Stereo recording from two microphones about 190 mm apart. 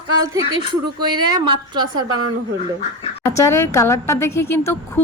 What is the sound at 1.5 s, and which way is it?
Speech, 25° right (ahead or behind).